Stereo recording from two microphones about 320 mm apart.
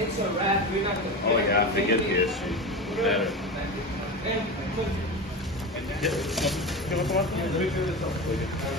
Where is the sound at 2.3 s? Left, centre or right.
Centre.